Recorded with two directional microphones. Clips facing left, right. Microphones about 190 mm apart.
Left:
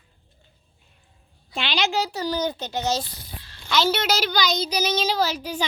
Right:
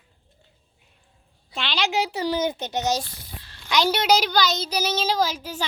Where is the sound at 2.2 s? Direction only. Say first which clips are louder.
Right 1 dB; 25° right (ahead or behind).